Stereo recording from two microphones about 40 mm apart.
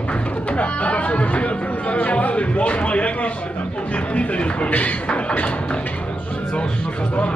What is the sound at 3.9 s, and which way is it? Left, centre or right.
Speech, left.